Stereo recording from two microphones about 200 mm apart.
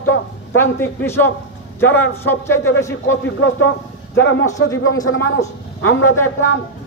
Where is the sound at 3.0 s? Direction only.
70° left (ahead or behind).